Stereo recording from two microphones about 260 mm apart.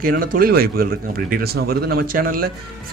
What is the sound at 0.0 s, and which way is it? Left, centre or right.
Speech, right.